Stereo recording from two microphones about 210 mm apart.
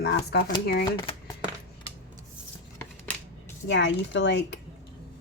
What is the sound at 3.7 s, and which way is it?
Speech, 60° left (ahead or behind).